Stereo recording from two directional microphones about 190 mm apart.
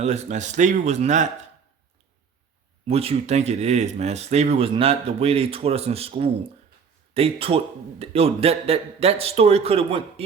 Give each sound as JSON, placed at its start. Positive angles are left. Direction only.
{"t": 0.0, "sound": "speech", "side_deg": -35}
{"t": 2.8, "sound": "speech", "side_deg": -30}